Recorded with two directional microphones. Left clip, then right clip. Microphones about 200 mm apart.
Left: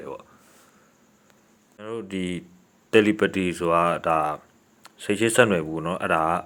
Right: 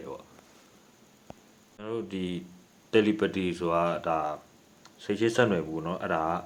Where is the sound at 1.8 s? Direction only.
20° left (ahead or behind).